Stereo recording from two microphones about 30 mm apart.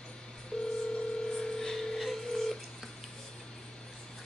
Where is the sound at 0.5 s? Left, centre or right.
Left.